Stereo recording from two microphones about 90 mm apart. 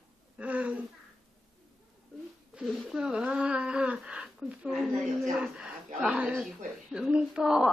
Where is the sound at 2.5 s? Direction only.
5° right (ahead or behind).